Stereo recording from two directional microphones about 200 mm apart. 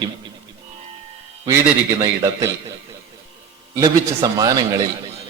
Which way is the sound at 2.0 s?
20° right (ahead or behind).